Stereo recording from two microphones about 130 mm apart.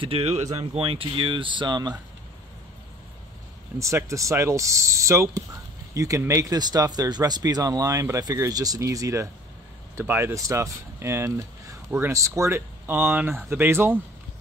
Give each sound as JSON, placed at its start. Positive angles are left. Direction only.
{"t": 0.0, "sound": "speech", "side_deg": -50}
{"t": 0.6, "sound": "speech", "side_deg": -45}
{"t": 3.8, "sound": "speech", "side_deg": -25}